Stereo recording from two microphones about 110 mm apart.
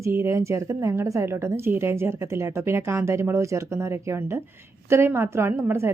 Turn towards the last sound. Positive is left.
turn(degrees=-20)  # may be behind; listen again after turning